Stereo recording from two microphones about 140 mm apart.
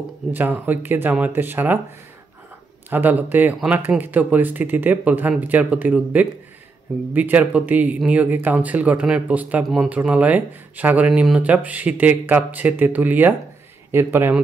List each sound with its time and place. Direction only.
0.3 s speech: 15° right (ahead or behind)
2.9 s speech: 10° right (ahead or behind)